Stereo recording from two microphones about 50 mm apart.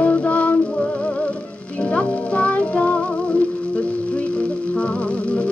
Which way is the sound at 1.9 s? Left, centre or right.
Left.